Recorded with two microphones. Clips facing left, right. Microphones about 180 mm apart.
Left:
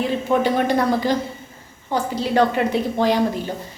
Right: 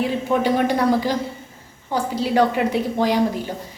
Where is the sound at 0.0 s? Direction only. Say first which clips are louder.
Left 1 dB; 10° right (ahead or behind).